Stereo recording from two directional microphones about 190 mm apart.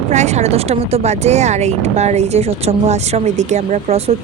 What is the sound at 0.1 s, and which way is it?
Speech, 35° right (ahead or behind).